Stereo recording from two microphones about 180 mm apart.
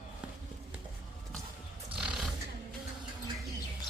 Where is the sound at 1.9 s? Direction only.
5° right (ahead or behind).